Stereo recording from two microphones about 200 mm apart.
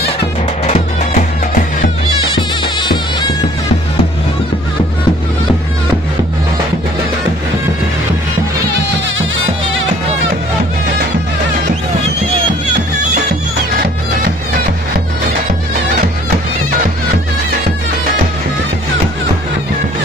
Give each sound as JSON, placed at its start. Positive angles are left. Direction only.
{"t": 0.6, "sound": "music", "side_deg": 35}
{"t": 2.3, "sound": "music", "side_deg": 25}